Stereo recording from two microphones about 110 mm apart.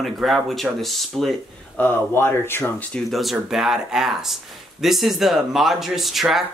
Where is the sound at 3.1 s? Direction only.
Centre (ahead or behind).